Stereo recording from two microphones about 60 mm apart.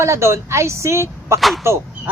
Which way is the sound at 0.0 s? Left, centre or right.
Right.